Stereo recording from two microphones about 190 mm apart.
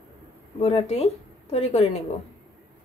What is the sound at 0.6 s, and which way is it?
A woman's voice, 30° left (ahead or behind).